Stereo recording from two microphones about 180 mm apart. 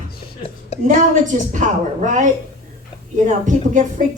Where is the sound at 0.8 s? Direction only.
45° right (ahead or behind).